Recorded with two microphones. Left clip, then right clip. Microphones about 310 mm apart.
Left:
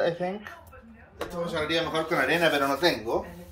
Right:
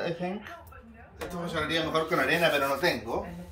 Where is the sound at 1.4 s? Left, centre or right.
Centre.